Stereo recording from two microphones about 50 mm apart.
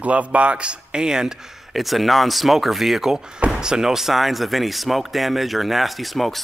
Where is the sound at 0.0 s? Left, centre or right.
Right.